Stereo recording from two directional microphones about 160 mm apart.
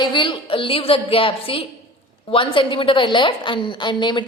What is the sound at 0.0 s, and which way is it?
A woman's voice, 30° left (ahead or behind).